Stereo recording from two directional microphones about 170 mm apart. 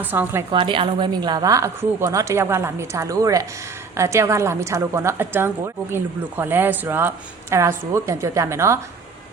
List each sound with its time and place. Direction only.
0.0 s a woman's voice: 10° right (ahead or behind)
0.5 s a woman's voice: 30° right (ahead or behind)